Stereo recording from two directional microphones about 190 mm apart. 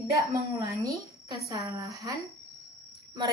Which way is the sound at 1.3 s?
20° right (ahead or behind).